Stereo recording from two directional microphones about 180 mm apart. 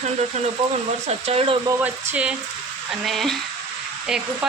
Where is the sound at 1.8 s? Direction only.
10° right (ahead or behind).